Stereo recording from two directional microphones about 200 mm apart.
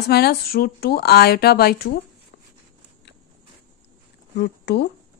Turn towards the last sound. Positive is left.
turn(degrees=55)  # may be behind; listen again after turning